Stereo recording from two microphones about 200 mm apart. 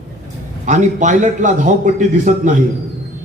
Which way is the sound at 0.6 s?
40° right (ahead or behind).